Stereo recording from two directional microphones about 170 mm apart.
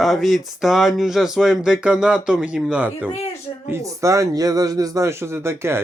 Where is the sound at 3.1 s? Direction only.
40° left (ahead or behind).